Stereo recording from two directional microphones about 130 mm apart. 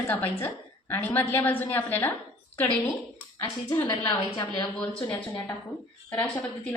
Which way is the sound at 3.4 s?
25° left (ahead or behind).